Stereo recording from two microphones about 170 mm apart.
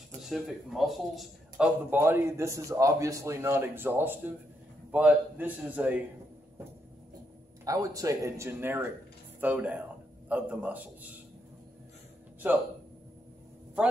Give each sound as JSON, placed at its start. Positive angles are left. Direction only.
{"t": 0.2, "sound": "speech", "side_deg": 0}
{"t": 1.9, "sound": "a man's voice", "side_deg": -15}
{"t": 7.6, "sound": "a man's voice", "side_deg": -20}